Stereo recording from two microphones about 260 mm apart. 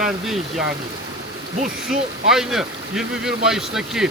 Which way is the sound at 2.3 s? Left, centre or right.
Centre.